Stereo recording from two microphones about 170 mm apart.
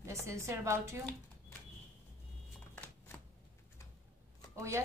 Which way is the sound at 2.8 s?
5° left (ahead or behind).